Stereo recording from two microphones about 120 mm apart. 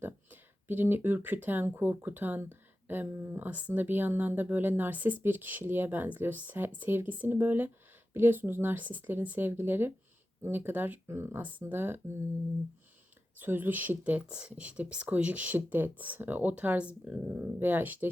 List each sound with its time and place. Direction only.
0.0 s speech: 15° right (ahead or behind)
13.4 s speech: 15° right (ahead or behind)